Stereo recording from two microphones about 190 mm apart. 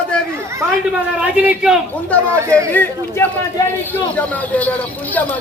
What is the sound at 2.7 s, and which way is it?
Speech, 10° left (ahead or behind).